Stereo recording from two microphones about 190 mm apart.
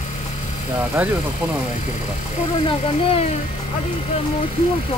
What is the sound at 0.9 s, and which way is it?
Speech, 10° right (ahead or behind).